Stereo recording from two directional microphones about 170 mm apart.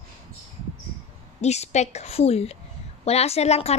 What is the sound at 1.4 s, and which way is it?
A woman's voice, 40° left (ahead or behind).